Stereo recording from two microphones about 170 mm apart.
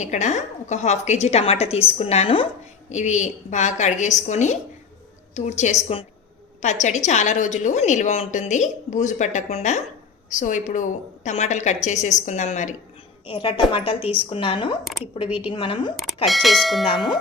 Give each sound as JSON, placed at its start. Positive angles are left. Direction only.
{"t": 0.0, "sound": "a woman's voice", "side_deg": 45}
{"t": 13.2, "sound": "a woman's voice", "side_deg": 30}
{"t": 16.2, "sound": "speech", "side_deg": 0}